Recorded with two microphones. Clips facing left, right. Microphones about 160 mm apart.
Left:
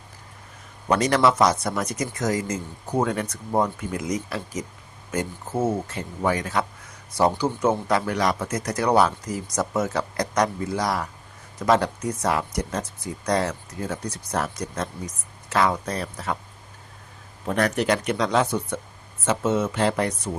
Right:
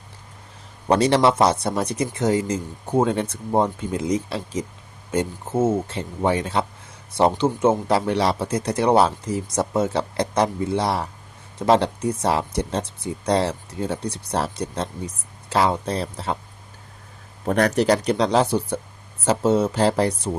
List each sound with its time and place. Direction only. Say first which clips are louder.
0.9 s speech: right 3 dB; 30° right (ahead or behind)
5.6 s speech: right 3 dB; 25° right (ahead or behind)
17.4 s speech: right 4 dB; 40° right (ahead or behind)